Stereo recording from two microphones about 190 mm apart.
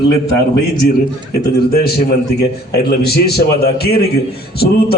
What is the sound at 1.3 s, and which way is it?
A man's voice, 55° left (ahead or behind).